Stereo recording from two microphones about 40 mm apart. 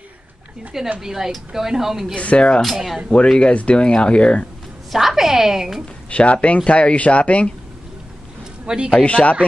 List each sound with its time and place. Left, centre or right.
0.9 s speech: centre
2.1 s speech: left
2.6 s speech: centre
3.3 s speech: left
4.9 s a woman's voice: centre
6.0 s speech: left
8.6 s a man's voice: right
8.9 s speech: left